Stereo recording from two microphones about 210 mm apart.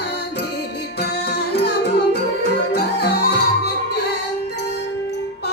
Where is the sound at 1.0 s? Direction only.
50° left (ahead or behind).